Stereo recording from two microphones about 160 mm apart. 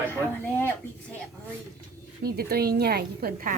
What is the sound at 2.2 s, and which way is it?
A woman's voice, 75° right (ahead or behind).